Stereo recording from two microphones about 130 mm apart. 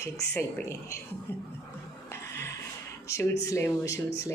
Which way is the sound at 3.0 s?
25° left (ahead or behind).